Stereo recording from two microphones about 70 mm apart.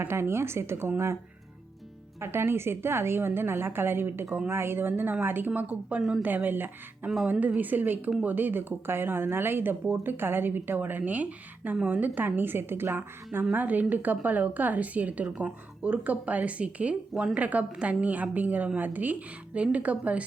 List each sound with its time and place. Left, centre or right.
0.0 s a woman's voice: right
2.2 s a woman's voice: right
6.0 s speech: centre
6.2 s speech: right
13.4 s speech: right